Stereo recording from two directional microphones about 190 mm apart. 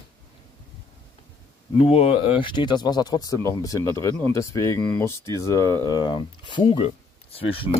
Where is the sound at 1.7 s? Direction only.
30° left (ahead or behind).